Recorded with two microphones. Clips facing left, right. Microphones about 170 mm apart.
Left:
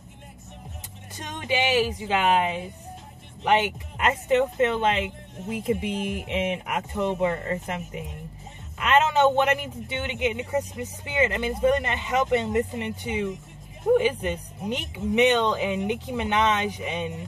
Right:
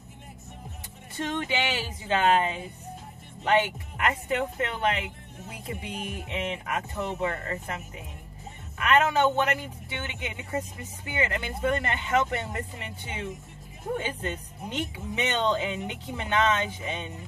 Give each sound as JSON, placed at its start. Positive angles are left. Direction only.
{"t": 1.1, "sound": "a man's voice", "side_deg": 20}